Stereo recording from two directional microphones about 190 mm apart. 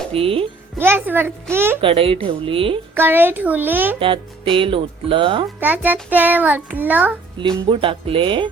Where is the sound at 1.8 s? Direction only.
30° right (ahead or behind).